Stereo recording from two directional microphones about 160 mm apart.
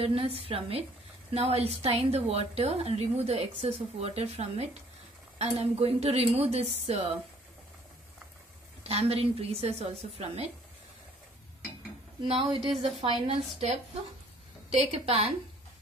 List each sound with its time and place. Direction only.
0.0 s a woman's voice: 35° right (ahead or behind)
8.8 s a woman's voice: 40° right (ahead or behind)
12.2 s a woman's voice: 35° right (ahead or behind)